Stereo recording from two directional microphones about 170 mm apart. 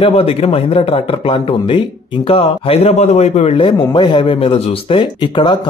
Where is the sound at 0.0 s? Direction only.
35° left (ahead or behind).